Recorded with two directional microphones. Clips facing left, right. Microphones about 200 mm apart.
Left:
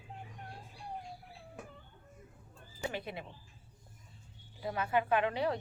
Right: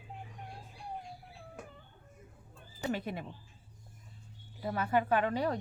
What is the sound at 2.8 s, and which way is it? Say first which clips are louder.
Speech: right 4 dB; 45° right (ahead or behind).